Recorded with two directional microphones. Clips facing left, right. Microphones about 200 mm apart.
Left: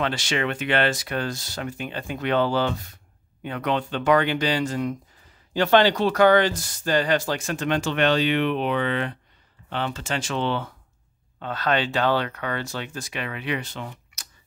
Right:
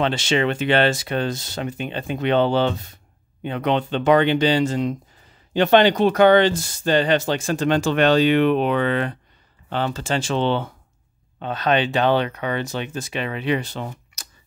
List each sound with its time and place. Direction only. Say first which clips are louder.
0.0 s speech: right 5 dB; 25° right (ahead or behind)